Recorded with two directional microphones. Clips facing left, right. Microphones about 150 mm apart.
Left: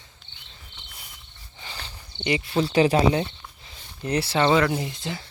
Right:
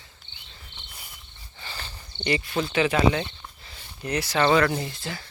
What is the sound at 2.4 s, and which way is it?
Speech, 30° left (ahead or behind).